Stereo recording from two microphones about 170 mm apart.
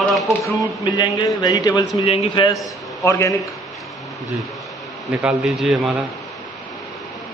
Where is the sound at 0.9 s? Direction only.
25° left (ahead or behind).